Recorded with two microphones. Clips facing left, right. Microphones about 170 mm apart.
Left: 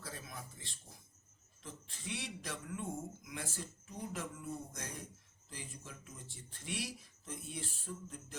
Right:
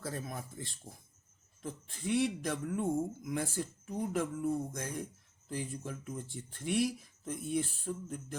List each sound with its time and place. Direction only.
0.0 s speech: 50° right (ahead or behind)